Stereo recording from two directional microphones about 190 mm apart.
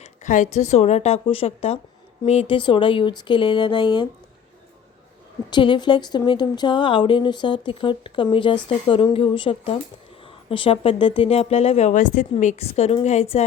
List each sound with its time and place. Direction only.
0.0 s speech: 40° left (ahead or behind); by 4.1 s 25° left (ahead or behind)
5.5 s speech: 25° left (ahead or behind)